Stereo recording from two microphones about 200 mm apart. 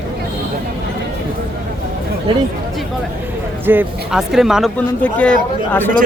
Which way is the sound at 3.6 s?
10° right (ahead or behind).